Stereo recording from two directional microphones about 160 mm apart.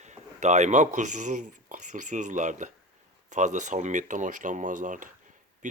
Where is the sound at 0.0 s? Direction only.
45° right (ahead or behind).